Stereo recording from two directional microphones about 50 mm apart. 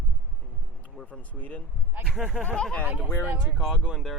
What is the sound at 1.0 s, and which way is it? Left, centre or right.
Speech, left.